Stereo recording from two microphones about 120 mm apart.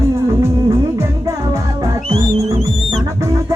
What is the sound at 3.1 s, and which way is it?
Music, 25° right (ahead or behind).